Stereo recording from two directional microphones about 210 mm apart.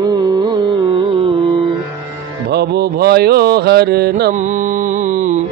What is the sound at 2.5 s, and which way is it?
Music, 50° right (ahead or behind).